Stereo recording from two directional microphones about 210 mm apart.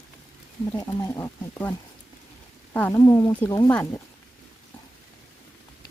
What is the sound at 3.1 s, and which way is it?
Speech, 20° left (ahead or behind).